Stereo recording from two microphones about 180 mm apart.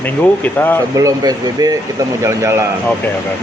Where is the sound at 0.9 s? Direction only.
20° right (ahead or behind).